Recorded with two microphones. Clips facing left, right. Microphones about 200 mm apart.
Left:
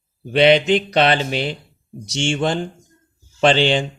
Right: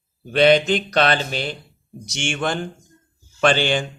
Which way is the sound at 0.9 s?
25° left (ahead or behind).